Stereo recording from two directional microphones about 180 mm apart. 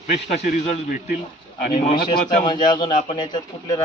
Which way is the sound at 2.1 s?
50° left (ahead or behind).